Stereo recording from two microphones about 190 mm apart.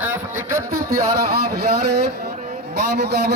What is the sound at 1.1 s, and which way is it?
Speech, 55° right (ahead or behind).